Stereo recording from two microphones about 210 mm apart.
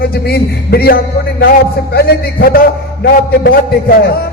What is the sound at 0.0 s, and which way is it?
A man's voice, 50° left (ahead or behind).